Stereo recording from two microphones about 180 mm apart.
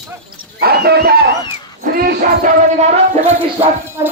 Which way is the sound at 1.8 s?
60° right (ahead or behind).